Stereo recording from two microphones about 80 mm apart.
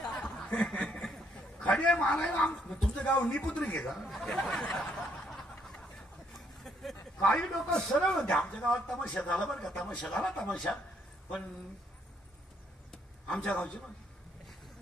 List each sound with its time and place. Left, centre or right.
0.0 s chuckle: centre
1.6 s a man's voice: centre
6.6 s a sound: centre
7.2 s a man's voice: centre
13.3 s a man's voice: centre